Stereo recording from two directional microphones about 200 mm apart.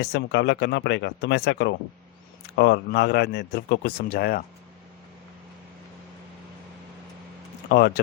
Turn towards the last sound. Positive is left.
turn(degrees=50)  # may be behind; listen again after turning